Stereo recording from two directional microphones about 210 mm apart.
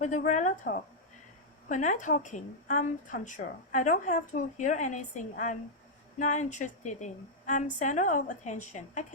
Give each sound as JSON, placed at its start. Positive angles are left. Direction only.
{"t": 0.0, "sound": "a woman's voice", "side_deg": 35}